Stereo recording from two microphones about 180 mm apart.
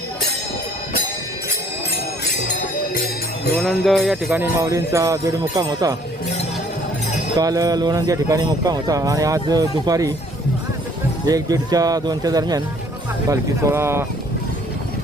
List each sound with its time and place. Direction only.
2.9 s music: 55° left (ahead or behind)
3.6 s jingle bell: centre (ahead or behind)
4.3 s speech: 15° right (ahead or behind)
7.3 s speech: 20° right (ahead or behind)
11.3 s speech: 20° right (ahead or behind)